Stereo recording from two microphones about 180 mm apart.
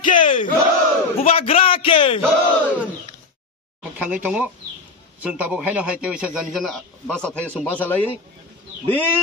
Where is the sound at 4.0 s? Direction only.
10° right (ahead or behind); by 8.0 s 10° left (ahead or behind).